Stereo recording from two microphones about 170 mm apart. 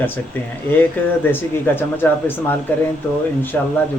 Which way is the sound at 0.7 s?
10° left (ahead or behind).